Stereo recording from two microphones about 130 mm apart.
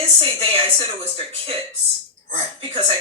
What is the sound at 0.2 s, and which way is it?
Speech, 45° right (ahead or behind).